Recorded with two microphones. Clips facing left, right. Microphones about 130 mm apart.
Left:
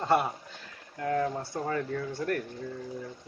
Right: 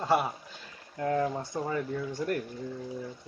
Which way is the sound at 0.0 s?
5° right (ahead or behind).